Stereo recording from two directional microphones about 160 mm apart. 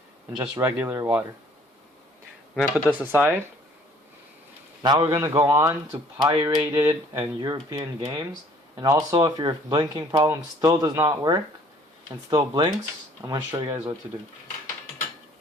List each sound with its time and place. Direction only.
0.6 s speech: 15° right (ahead or behind)
2.6 s speech: 5° left (ahead or behind)
3.0 s speech: 10° right (ahead or behind)
4.8 s a man's voice: 30° right (ahead or behind)